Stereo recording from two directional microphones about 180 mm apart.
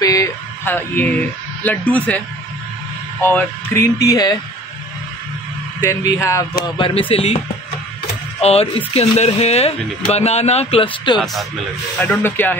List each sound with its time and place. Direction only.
0.0 s speech: 20° left (ahead or behind)
3.2 s speech: 10° left (ahead or behind)
5.8 s speech: 15° left (ahead or behind)
6.8 s speech: 30° left (ahead or behind)
8.4 s speech: 35° left (ahead or behind)
12.0 s speech: 10° left (ahead or behind)